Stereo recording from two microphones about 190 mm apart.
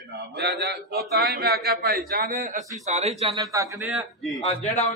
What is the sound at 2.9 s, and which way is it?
Speech, 35° right (ahead or behind).